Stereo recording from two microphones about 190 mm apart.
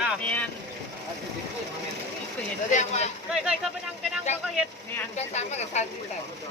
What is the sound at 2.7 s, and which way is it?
Speech, 35° left (ahead or behind).